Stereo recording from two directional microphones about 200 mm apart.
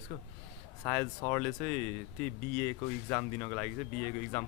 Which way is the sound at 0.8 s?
20° left (ahead or behind).